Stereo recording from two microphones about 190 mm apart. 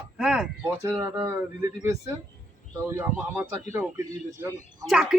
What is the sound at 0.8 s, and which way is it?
Speech, 15° right (ahead or behind).